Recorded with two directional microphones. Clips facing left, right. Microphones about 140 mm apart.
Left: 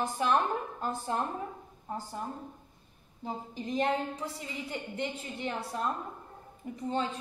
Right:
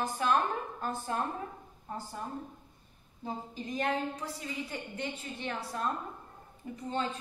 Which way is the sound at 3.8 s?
25° left (ahead or behind).